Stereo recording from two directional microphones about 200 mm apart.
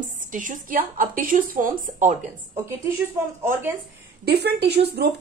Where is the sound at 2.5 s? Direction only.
15° right (ahead or behind).